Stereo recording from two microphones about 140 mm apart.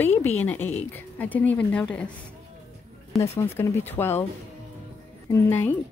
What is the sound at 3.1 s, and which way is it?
A woman's voice, 20° left (ahead or behind).